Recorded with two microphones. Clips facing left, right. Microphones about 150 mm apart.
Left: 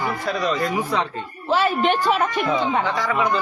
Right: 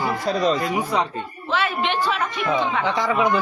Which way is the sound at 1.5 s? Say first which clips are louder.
Left 4 dB; 40° left (ahead or behind).